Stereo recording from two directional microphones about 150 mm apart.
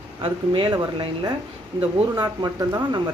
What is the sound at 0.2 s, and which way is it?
Speech, 35° right (ahead or behind).